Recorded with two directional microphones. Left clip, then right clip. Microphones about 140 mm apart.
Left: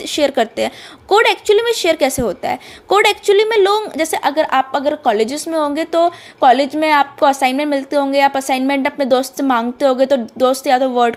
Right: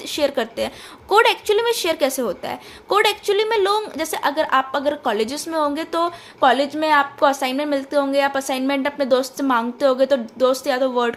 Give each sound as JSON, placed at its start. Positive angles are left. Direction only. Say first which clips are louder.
{"t": 0.0, "sound": "a woman's voice", "louder": "left 6 dB", "side_deg": 40}